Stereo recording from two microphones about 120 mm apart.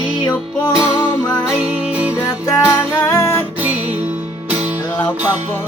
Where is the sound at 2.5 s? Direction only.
25° left (ahead or behind).